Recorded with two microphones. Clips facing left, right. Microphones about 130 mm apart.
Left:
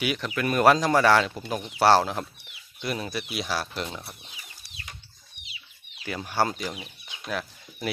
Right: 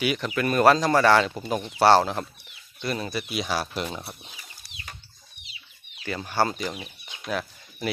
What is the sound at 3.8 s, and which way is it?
Speech, 25° right (ahead or behind).